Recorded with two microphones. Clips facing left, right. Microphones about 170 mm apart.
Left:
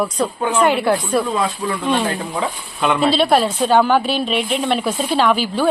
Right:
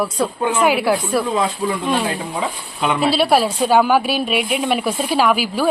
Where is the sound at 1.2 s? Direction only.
20° right (ahead or behind).